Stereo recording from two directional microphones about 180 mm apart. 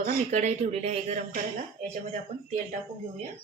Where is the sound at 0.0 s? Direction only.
40° right (ahead or behind).